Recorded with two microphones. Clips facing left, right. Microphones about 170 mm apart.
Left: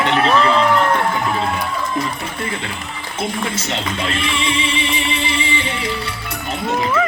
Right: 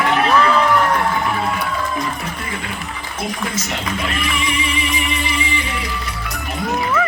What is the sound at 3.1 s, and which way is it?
Speech, 30° left (ahead or behind).